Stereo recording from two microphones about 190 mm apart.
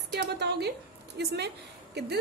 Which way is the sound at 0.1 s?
60° right (ahead or behind).